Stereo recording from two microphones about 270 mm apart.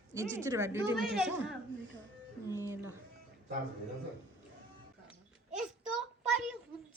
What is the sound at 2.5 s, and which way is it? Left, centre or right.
Speech, centre.